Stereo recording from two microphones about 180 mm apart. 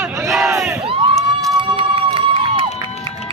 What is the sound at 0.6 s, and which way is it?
Crowd, 5° right (ahead or behind).